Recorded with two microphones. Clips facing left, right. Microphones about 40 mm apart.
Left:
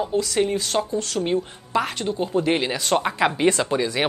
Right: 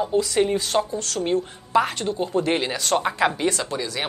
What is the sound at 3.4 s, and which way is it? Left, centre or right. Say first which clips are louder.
Speech: left 5 dB; centre.